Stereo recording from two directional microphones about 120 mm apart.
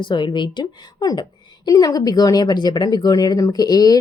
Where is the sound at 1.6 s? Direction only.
30° left (ahead or behind).